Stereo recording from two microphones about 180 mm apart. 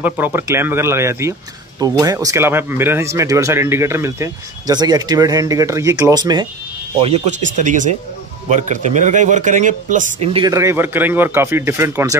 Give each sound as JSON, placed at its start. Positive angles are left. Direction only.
{"t": 0.0, "sound": "speech", "side_deg": -10}
{"t": 7.0, "sound": "speech", "side_deg": -35}
{"t": 10.3, "sound": "speech", "side_deg": -20}